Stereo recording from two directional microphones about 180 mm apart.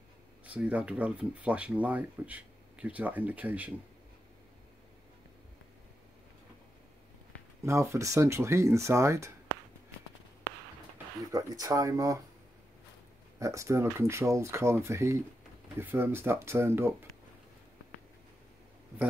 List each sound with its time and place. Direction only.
0.5 s speech: 10° right (ahead or behind)
7.6 s speech: 15° right (ahead or behind)
11.1 s speech: 20° right (ahead or behind)
13.4 s speech: 15° right (ahead or behind)